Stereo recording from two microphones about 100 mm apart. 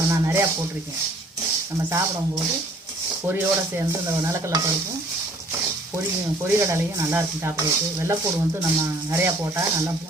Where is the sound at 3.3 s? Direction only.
25° right (ahead or behind).